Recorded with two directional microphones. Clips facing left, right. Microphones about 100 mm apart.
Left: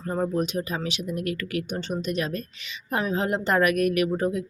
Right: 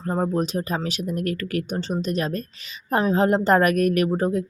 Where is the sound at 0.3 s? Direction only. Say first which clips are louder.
Right 2 dB; 35° right (ahead or behind).